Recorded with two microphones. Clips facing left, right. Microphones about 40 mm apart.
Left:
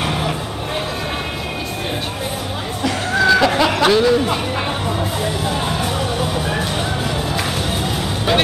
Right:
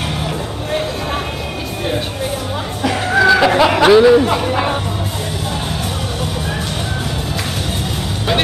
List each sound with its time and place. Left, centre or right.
2.8 s music: centre